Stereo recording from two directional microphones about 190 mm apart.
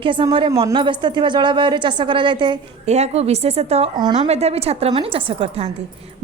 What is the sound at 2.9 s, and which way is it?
A woman's voice, 35° right (ahead or behind).